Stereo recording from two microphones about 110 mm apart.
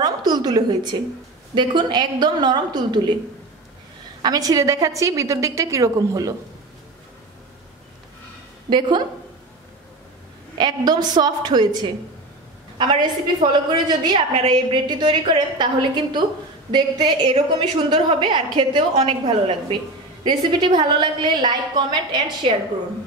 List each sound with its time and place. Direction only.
0.0 s a sound: 40° right (ahead or behind)
1.5 s a woman's voice: 45° right (ahead or behind)
4.2 s a woman's voice: 35° right (ahead or behind)
8.6 s a woman's voice: 45° right (ahead or behind)
10.6 s a woman's voice: 40° right (ahead or behind)
20.2 s a woman's voice: 40° right (ahead or behind)